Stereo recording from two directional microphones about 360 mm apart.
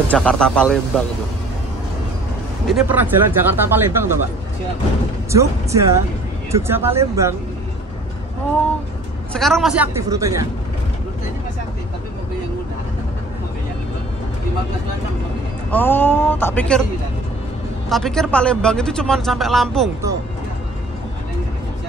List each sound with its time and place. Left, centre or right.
0.1 s speech: centre
2.6 s speech: centre
5.3 s speech: centre
9.3 s speech: centre
15.7 s speech: centre
17.8 s speech: centre